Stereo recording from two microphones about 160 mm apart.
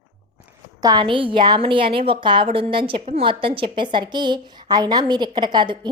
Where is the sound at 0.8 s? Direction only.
25° right (ahead or behind).